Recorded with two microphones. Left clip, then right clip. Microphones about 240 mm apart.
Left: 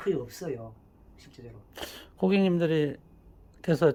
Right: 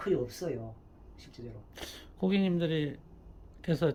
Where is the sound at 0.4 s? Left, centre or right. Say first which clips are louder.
Left 1 dB; centre.